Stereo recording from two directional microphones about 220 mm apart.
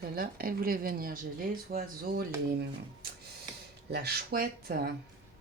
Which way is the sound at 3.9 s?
45° right (ahead or behind).